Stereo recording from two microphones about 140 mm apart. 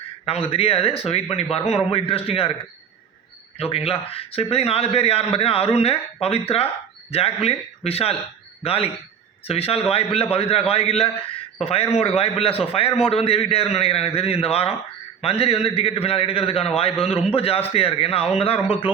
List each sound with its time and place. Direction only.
0.3 s a man's voice: 45° left (ahead or behind)
3.6 s a man's voice: 45° left (ahead or behind)